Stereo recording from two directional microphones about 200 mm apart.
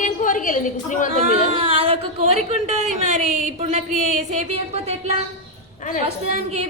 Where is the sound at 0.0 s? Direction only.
40° left (ahead or behind).